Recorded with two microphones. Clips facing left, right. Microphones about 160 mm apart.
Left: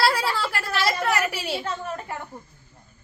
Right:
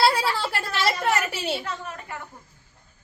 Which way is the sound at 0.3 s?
25° right (ahead or behind).